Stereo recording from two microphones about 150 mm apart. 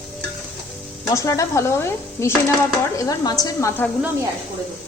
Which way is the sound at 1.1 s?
20° left (ahead or behind).